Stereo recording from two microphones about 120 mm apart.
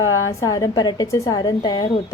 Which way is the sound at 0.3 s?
30° left (ahead or behind).